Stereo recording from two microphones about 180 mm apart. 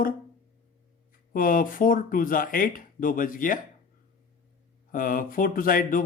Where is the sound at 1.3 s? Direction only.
50° left (ahead or behind).